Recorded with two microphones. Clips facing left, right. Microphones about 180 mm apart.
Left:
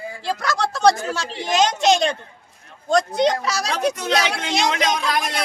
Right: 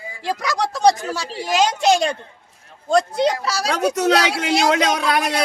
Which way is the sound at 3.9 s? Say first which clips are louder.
Right 5 dB; 80° right.